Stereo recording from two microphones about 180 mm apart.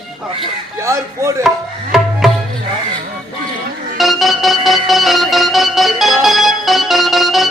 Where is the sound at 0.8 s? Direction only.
15° right (ahead or behind).